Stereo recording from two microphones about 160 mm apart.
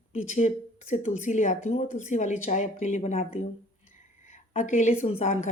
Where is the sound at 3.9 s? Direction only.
50° left (ahead or behind).